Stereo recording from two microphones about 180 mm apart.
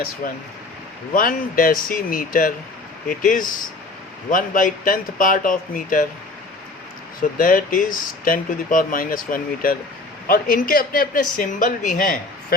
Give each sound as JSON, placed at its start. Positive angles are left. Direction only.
{"t": 1.1, "sound": "speech", "side_deg": 50}
{"t": 7.2, "sound": "speech", "side_deg": 50}